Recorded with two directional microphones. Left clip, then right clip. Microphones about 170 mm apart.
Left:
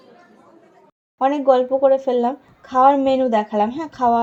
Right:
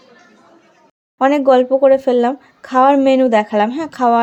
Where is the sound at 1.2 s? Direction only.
25° right (ahead or behind).